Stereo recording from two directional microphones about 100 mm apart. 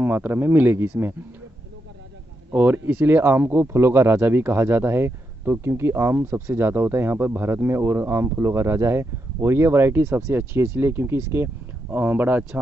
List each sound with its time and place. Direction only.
0.0 s speech: 20° right (ahead or behind)
2.5 s speech: 20° right (ahead or behind)
11.9 s speech: 15° right (ahead or behind)